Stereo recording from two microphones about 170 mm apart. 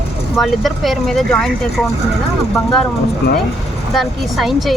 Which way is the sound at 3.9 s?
Centre (ahead or behind).